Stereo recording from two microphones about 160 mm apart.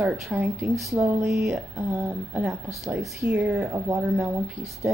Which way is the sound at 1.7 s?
20° right (ahead or behind).